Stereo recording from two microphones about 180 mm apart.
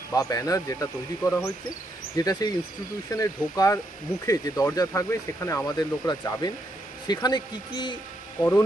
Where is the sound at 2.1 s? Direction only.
20° left (ahead or behind).